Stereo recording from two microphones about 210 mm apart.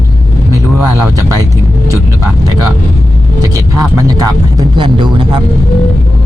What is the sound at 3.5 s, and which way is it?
Speech, 15° right (ahead or behind).